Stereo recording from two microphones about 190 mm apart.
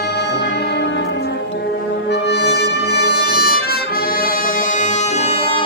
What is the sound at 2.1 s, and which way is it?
Brass instrument, 60° left (ahead or behind).